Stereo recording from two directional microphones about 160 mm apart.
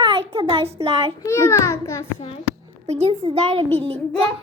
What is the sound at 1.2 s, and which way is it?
Speech, 15° left (ahead or behind).